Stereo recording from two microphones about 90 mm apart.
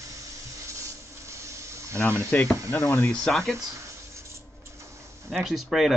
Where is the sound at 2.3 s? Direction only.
20° left (ahead or behind).